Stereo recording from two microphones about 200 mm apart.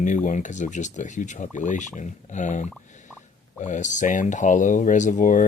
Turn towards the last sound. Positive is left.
turn(degrees=40)  # may be behind; listen again after turning